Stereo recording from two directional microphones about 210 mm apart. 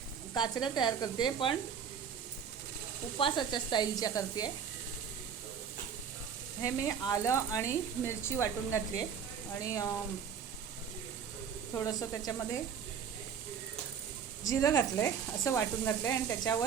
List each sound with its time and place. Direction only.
0.3 s speech: 20° left (ahead or behind)
3.2 s speech: 25° left (ahead or behind)
6.6 s speech: 15° left (ahead or behind)
11.7 s speech: 15° left (ahead or behind)
14.4 s speech: 15° left (ahead or behind)